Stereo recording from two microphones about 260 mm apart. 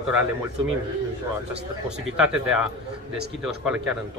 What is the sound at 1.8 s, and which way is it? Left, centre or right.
Speech, centre.